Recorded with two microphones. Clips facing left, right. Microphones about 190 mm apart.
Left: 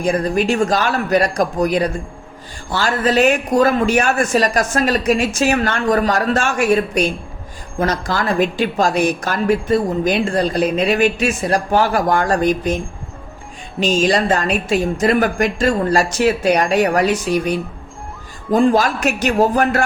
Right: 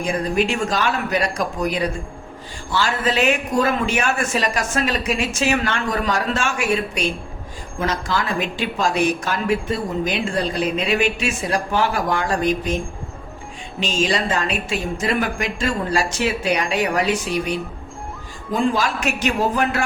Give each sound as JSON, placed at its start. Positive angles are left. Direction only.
{"t": 0.0, "sound": "a man's voice", "side_deg": 35}
{"t": 13.7, "sound": "a woman's voice", "side_deg": 40}
{"t": 18.5, "sound": "a woman's voice", "side_deg": 45}